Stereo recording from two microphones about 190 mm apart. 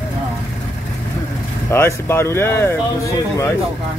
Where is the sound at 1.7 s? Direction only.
15° left (ahead or behind).